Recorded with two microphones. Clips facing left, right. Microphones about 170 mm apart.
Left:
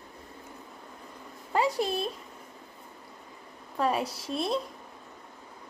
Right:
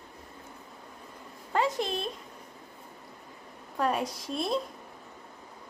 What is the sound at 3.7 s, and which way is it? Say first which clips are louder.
Speech: left 1 dB; centre (ahead or behind).